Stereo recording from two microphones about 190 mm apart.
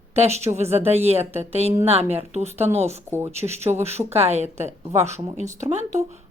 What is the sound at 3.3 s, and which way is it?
Speech, 35° right (ahead or behind).